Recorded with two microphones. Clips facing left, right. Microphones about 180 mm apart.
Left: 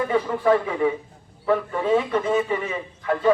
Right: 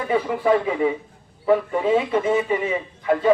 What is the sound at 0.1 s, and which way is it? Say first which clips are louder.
A man's voice: right 3 dB; 15° right (ahead or behind).